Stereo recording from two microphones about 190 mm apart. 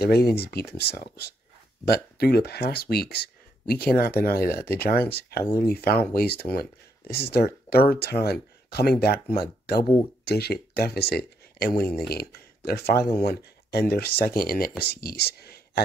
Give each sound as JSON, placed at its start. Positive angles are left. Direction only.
{"t": 0.0, "sound": "speech", "side_deg": 55}
{"t": 5.4, "sound": "speech", "side_deg": 15}
{"t": 5.7, "sound": "speech", "side_deg": 55}